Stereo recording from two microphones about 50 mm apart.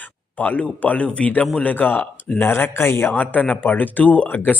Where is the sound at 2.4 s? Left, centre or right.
Left.